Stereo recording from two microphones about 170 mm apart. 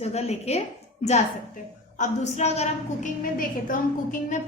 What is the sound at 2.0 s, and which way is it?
A woman's voice, 45° left (ahead or behind).